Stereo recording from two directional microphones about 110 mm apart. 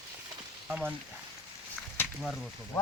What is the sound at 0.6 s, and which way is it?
Speech, 15° right (ahead or behind).